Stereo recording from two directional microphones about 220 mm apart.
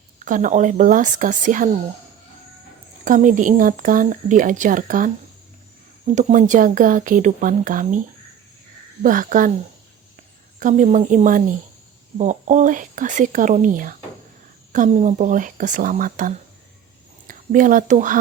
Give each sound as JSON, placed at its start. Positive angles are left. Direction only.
{"t": 0.3, "sound": "speech", "side_deg": -35}
{"t": 3.0, "sound": "speech", "side_deg": -35}
{"t": 6.1, "sound": "speech", "side_deg": -35}
{"t": 9.0, "sound": "speech", "side_deg": -40}
{"t": 10.6, "sound": "speech", "side_deg": -35}